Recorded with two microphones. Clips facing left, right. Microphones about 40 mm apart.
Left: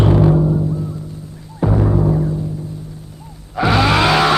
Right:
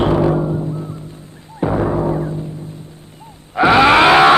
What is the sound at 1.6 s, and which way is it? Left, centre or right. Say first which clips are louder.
Timpani: even; right.